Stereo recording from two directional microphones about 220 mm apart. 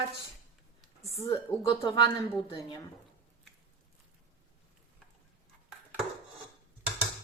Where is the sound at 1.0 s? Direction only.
30° left (ahead or behind).